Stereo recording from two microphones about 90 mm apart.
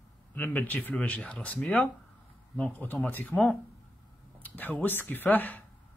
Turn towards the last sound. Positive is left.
turn(degrees=20)  # may be behind; listen again after turning